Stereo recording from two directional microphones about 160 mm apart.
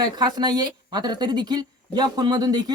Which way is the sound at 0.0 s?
25° right (ahead or behind).